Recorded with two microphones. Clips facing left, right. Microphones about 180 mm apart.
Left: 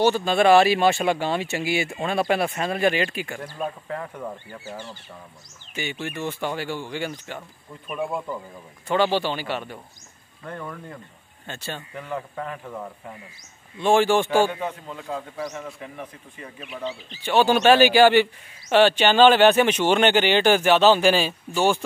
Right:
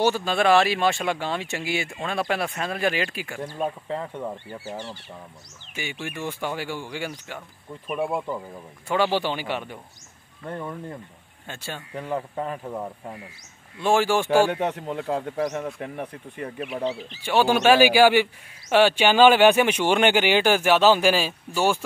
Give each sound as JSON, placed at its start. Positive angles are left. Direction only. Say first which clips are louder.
{"t": 0.0, "sound": "speech", "louder": "left 3 dB", "side_deg": -5}
{"t": 3.8, "sound": "speech", "louder": "right 2 dB", "side_deg": -25}
{"t": 5.8, "sound": "speech", "louder": "left 2 dB", "side_deg": -10}
{"t": 11.4, "sound": "speech", "louder": "left 2 dB", "side_deg": -10}
{"t": 11.9, "sound": "speech", "louder": "right 6 dB", "side_deg": -35}
{"t": 12.6, "sound": "speech", "louder": "right 3 dB", "side_deg": -20}
{"t": 13.7, "sound": "speech", "louder": "left 2 dB", "side_deg": -5}
{"t": 14.5, "sound": "speech", "louder": "right 5 dB", "side_deg": -70}
{"t": 17.2, "sound": "speech", "louder": "left 1 dB", "side_deg": -10}